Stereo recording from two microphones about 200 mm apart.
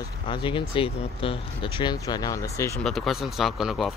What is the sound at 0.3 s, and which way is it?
Speech, 25° left (ahead or behind).